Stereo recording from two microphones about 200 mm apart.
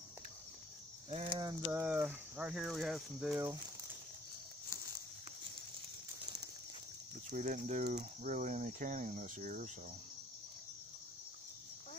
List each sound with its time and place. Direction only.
1.1 s speech: 25° right (ahead or behind); by 3.5 s 5° right (ahead or behind)
7.2 s speech: 40° right (ahead or behind)